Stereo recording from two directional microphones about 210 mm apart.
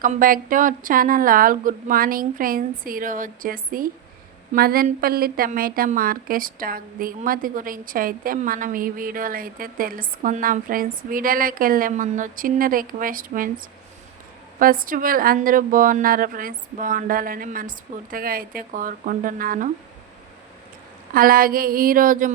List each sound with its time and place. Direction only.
0.0 s a woman's voice: 40° right (ahead or behind)
21.1 s speech: 45° right (ahead or behind)